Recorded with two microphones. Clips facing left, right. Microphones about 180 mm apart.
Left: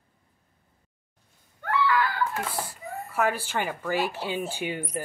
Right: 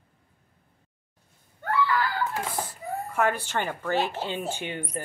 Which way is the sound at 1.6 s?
35° right (ahead or behind).